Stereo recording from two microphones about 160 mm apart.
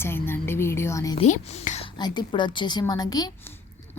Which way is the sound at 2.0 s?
25° left (ahead or behind).